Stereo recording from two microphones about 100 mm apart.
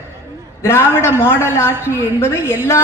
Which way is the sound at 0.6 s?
25° left (ahead or behind).